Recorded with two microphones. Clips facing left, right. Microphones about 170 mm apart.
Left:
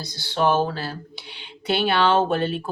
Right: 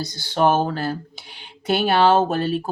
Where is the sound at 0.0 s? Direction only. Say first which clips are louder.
Right 3 dB; 50° right (ahead or behind).